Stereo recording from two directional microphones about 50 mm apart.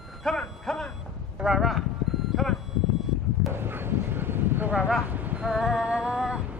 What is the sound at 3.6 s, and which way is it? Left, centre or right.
Bow-wow, right.